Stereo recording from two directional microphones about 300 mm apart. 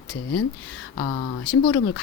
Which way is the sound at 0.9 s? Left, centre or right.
Left.